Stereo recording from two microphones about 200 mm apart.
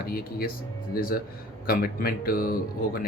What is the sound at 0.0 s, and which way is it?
Speech, 45° left (ahead or behind).